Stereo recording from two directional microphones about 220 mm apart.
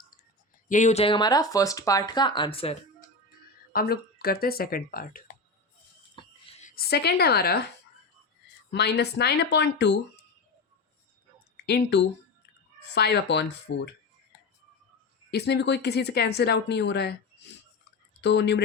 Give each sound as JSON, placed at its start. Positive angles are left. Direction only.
{"t": 0.7, "sound": "speech", "side_deg": 35}
{"t": 3.7, "sound": "speech", "side_deg": 45}
{"t": 6.1, "sound": "a sound", "side_deg": 25}
{"t": 8.7, "sound": "speech", "side_deg": 50}
{"t": 11.5, "sound": "a woman's voice", "side_deg": 50}
{"t": 15.3, "sound": "speech", "side_deg": 50}
{"t": 18.2, "sound": "speech", "side_deg": 50}